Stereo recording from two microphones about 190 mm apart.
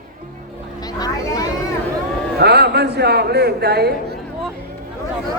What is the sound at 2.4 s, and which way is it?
A man's voice, 60° right (ahead or behind).